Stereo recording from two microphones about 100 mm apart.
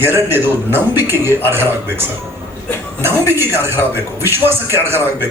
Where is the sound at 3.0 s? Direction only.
25° right (ahead or behind).